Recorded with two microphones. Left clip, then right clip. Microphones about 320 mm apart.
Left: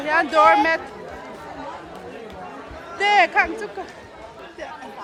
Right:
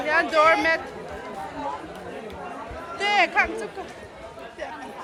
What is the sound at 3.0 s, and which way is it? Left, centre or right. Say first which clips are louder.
Speech: left 4 dB; centre.